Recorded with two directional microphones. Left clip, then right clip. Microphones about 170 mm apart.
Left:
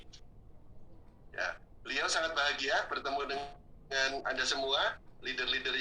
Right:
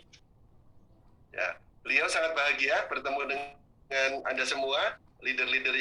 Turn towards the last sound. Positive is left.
turn(degrees=-45)  # may be behind; listen again after turning